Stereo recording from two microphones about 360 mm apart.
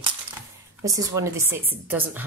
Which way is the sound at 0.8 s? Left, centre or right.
Centre.